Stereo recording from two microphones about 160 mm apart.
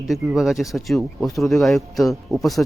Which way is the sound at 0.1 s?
Centre (ahead or behind).